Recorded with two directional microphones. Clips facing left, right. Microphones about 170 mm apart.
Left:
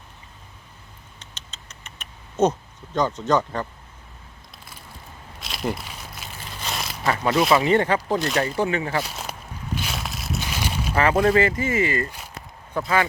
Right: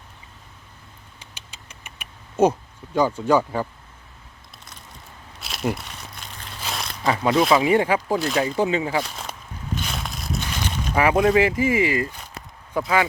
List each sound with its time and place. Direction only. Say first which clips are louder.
1.2 s rodents: right 1 dB; 10° right (ahead or behind)
5.4 s crumpling: right 2 dB; centre (ahead or behind)
7.3 s speech: right 1 dB; centre (ahead or behind)
7.6 s speech: right 1 dB; 10° right (ahead or behind)
8.4 s speech: right 2 dB; 15° right (ahead or behind)
9.0 s speech: right 1 dB; 5° left (ahead or behind)
9.7 s a sound: even; 5° left (ahead or behind)
10.9 s speech: right 1 dB; 10° right (ahead or behind)